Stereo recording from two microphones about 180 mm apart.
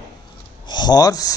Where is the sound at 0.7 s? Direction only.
25° left (ahead or behind).